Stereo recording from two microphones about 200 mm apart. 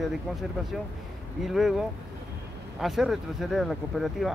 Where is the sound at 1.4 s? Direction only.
Centre (ahead or behind).